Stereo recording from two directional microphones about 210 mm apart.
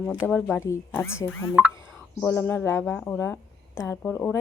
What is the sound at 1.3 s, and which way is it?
Speech, 75° left (ahead or behind).